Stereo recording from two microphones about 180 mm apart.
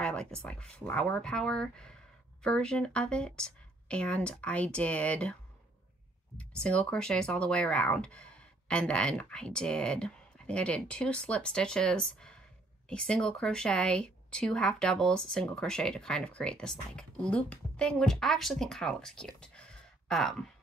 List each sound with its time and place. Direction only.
0.0 s speech: 5° left (ahead or behind)
6.3 s speech: 5° left (ahead or behind)